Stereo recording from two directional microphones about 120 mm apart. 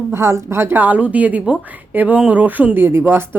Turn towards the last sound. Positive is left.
turn(degrees=-20)  # may be behind; listen again after turning